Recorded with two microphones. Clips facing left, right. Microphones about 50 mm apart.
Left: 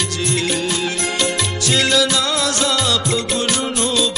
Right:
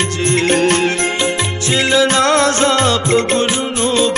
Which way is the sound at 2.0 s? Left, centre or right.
Right.